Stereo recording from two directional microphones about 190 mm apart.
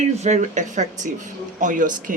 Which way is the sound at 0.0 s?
35° right (ahead or behind).